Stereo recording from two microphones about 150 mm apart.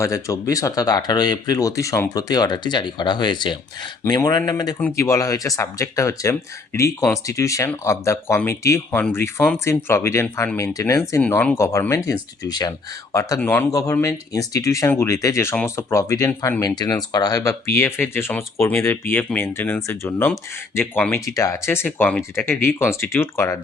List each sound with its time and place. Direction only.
0.0 s speech: 20° left (ahead or behind)